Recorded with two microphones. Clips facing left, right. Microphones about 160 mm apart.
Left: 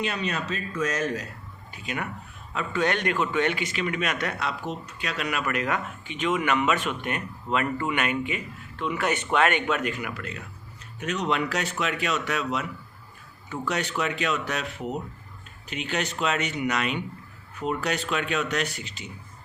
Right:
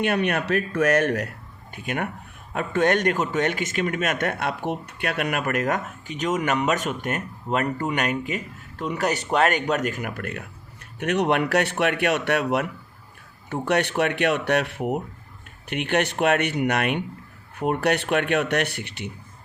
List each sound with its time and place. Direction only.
0.0 s speech: 60° right (ahead or behind)
1.7 s a man's voice: 55° right (ahead or behind)